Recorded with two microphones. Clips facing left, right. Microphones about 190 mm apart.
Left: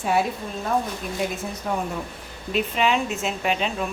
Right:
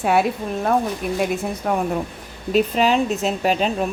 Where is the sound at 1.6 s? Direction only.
60° right (ahead or behind).